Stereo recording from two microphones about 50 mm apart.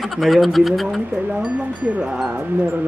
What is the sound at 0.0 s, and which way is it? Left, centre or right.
Speech, centre.